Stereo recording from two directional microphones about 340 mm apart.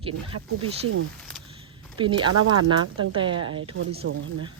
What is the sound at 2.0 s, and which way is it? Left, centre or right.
Speech, centre.